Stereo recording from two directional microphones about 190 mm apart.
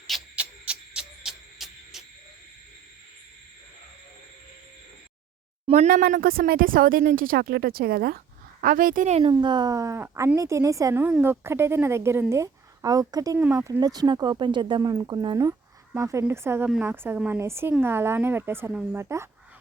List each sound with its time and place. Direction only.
0.1 s a sound: 5° right (ahead or behind)
5.6 s speech: 35° right (ahead or behind)
9.3 s a woman's voice: 25° right (ahead or behind)